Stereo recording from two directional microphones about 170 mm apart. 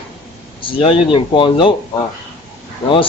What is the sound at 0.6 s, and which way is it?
Speech, 30° left (ahead or behind).